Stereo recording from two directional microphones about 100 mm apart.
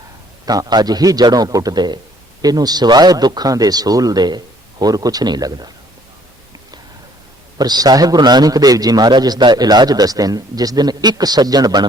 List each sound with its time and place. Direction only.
0.4 s a man's voice: 40° right (ahead or behind)
7.6 s a man's voice: 40° right (ahead or behind)